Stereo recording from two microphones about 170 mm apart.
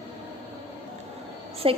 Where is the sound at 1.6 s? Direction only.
35° right (ahead or behind).